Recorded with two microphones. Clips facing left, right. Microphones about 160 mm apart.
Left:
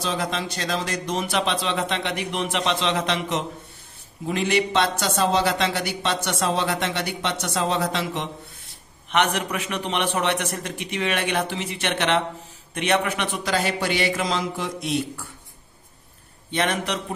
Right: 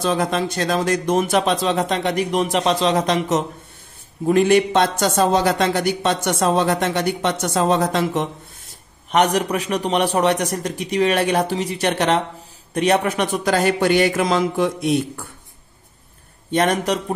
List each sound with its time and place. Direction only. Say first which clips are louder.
0.0 s a man's voice: right 7 dB; 50° right (ahead or behind)
16.4 s a man's voice: right 6 dB; 45° right (ahead or behind)